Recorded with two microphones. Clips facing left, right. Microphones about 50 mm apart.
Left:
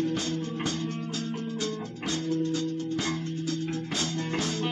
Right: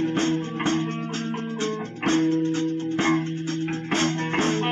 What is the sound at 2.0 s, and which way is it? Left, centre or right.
Music, right.